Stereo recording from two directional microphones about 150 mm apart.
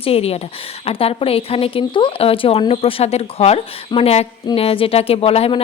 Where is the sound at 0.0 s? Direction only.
40° left (ahead or behind).